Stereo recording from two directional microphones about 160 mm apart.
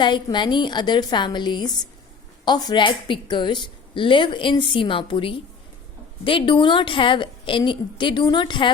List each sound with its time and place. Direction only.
0.0 s a woman's voice: 30° left (ahead or behind)